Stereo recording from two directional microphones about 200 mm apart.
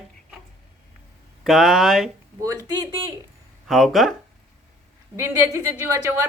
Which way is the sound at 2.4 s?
15° right (ahead or behind).